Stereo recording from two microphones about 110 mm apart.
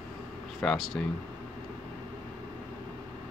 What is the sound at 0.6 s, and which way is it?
Speech, 5° left (ahead or behind).